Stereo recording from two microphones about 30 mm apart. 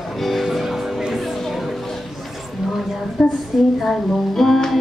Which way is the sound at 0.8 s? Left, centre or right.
Centre.